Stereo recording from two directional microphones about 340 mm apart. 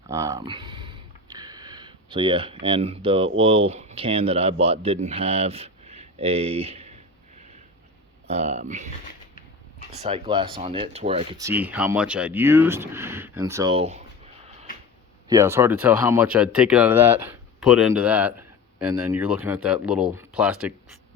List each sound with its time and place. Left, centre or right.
0.1 s a sound: centre
1.4 s speech: centre
8.3 s speech: centre
9.9 s speech: centre
15.3 s speech: centre